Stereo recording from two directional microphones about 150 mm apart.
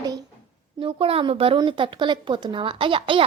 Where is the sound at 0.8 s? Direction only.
35° right (ahead or behind).